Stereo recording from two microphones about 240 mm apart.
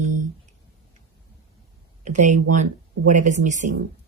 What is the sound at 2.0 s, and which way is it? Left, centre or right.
Speech, right.